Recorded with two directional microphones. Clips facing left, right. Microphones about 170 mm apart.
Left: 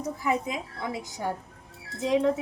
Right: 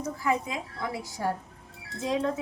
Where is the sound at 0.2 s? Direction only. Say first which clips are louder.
Even; 20° left (ahead or behind).